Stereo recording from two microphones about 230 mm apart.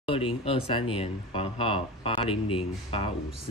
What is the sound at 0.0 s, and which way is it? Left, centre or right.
Speech, left.